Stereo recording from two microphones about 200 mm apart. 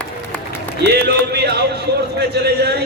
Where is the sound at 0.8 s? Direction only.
55° right (ahead or behind).